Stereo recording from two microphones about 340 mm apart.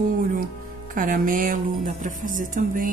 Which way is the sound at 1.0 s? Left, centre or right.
Right.